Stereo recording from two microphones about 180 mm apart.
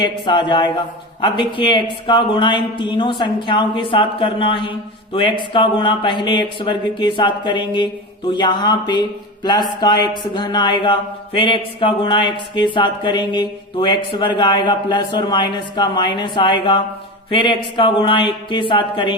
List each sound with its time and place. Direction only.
0.0 s speech: 25° left (ahead or behind)